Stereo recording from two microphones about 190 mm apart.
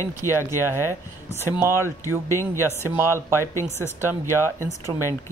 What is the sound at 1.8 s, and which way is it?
Speech, 15° left (ahead or behind).